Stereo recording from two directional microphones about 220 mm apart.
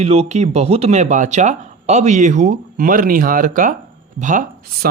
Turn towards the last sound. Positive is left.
turn(degrees=-40)  # may be behind; listen again after turning